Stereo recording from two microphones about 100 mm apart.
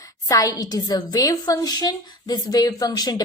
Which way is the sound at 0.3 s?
35° left (ahead or behind).